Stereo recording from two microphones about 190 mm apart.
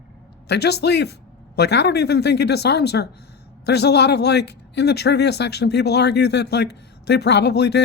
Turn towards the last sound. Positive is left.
turn(degrees=60)  # may be behind; listen again after turning